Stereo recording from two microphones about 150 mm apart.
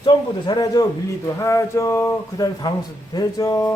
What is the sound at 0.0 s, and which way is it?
A man's voice, 30° left (ahead or behind).